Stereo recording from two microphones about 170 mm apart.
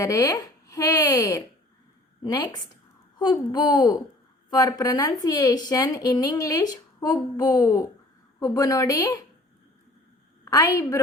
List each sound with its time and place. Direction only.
0.0 s speech: 20° left (ahead or behind)
10.4 s a woman's voice: 20° left (ahead or behind)